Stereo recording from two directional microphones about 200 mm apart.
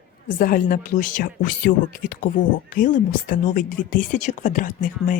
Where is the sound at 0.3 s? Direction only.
45° left (ahead or behind).